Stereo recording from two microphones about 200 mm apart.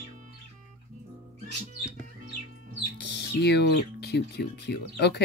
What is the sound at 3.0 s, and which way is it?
Speech, 55° left (ahead or behind).